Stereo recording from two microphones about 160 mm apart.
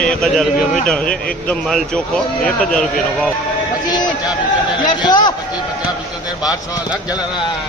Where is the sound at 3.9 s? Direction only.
25° left (ahead or behind).